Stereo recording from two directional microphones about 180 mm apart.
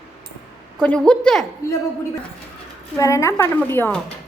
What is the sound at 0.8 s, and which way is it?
Speech, 5° left (ahead or behind).